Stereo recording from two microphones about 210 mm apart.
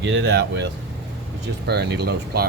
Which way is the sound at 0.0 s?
55° right (ahead or behind).